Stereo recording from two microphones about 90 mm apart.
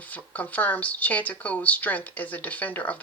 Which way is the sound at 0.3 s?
20° left (ahead or behind).